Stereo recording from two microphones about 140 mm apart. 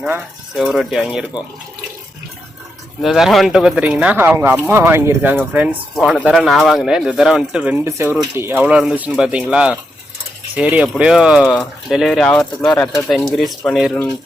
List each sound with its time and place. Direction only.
0.0 s speech: 5° right (ahead or behind)
1.3 s speech: 30° left (ahead or behind)
3.0 s speech: centre (ahead or behind)
13.1 s speech: centre (ahead or behind)